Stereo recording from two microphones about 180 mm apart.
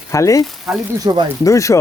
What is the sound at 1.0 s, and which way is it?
Speech, 20° right (ahead or behind).